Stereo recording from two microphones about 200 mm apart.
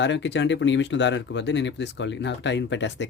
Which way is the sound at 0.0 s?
60° left (ahead or behind).